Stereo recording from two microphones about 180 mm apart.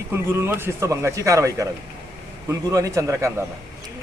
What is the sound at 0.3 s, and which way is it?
A man's voice, 15° right (ahead or behind).